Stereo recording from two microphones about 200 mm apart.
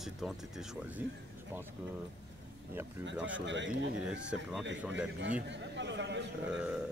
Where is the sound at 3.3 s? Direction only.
65° right (ahead or behind).